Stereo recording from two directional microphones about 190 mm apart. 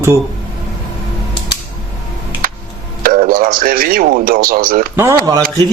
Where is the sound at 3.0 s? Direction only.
50° right (ahead or behind).